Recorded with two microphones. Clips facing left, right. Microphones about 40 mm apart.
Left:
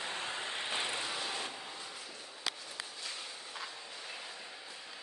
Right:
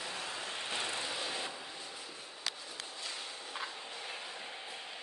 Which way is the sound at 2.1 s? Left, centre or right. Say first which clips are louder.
Left 2 dB; centre.